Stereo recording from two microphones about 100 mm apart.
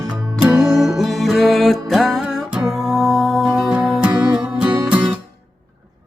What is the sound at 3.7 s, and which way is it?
Music, 15° right (ahead or behind).